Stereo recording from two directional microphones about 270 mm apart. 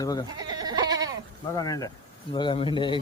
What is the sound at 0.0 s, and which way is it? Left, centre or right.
Speech, centre.